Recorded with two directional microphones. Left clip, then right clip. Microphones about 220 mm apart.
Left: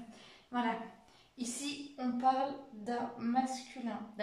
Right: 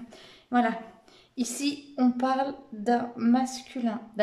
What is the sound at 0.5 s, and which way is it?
A woman's voice, 50° right (ahead or behind).